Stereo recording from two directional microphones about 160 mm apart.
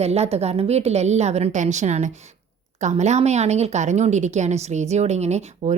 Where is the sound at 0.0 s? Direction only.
40° right (ahead or behind).